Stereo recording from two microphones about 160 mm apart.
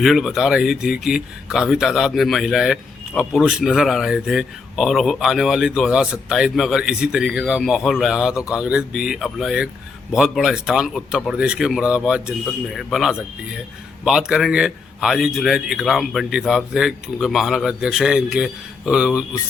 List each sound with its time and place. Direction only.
0.0 s speech: centre (ahead or behind)